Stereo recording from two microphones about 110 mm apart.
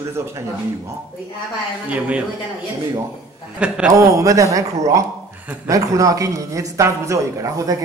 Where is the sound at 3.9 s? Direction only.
30° right (ahead or behind).